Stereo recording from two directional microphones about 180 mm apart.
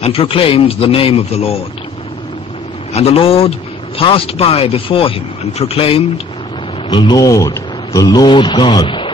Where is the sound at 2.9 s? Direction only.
35° left (ahead or behind).